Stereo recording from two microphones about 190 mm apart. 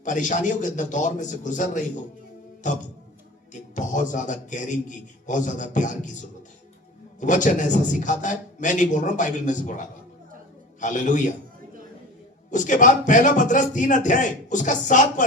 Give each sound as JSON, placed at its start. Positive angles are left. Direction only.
{"t": 0.0, "sound": "speech", "side_deg": 40}
{"t": 3.8, "sound": "speech", "side_deg": 40}
{"t": 7.2, "sound": "speech", "side_deg": 40}
{"t": 10.8, "sound": "speech", "side_deg": 40}
{"t": 12.5, "sound": "speech", "side_deg": 40}